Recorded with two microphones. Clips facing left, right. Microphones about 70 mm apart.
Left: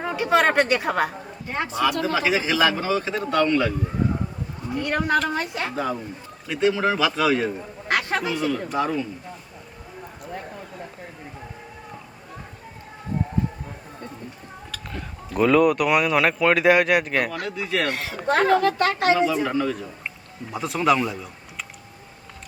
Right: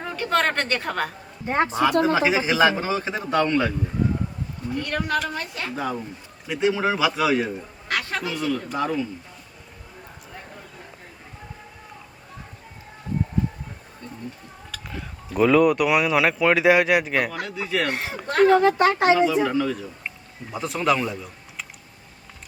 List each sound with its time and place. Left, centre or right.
0.0 s a woman's voice: centre
1.5 s speech: right
4.7 s a woman's voice: left
5.7 s a man's voice: centre
7.9 s a sound: left
8.4 s speech: centre
14.7 s speech: centre
17.8 s speech: right
18.3 s a woman's voice: left
18.5 s speech: right
19.2 s speech: centre